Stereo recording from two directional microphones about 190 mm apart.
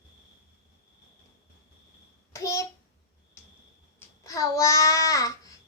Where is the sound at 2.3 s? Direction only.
15° left (ahead or behind).